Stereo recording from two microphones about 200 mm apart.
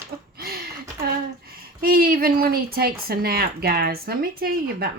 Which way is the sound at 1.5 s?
50° right (ahead or behind).